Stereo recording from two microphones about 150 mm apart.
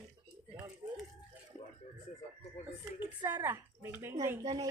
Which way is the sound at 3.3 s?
15° right (ahead or behind).